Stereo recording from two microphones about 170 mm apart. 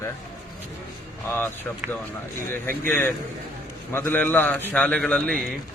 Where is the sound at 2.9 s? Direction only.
10° left (ahead or behind).